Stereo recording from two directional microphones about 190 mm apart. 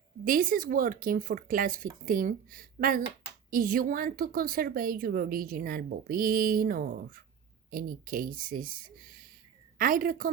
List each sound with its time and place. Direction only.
0.3 s a woman's voice: 45° right (ahead or behind)